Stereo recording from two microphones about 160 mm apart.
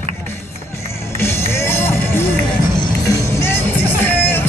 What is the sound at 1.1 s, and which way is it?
Music, 15° left (ahead or behind).